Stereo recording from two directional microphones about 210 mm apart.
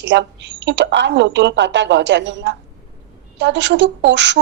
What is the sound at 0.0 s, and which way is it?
A woman's voice, 55° right (ahead or behind).